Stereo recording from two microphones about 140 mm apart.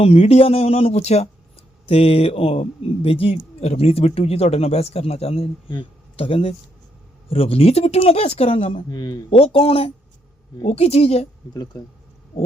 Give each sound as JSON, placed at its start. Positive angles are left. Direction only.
{"t": 0.0, "sound": "a man's voice", "side_deg": 45}
{"t": 8.9, "sound": "speech", "side_deg": 30}
{"t": 9.3, "sound": "a man's voice", "side_deg": 40}
{"t": 11.5, "sound": "speech", "side_deg": 30}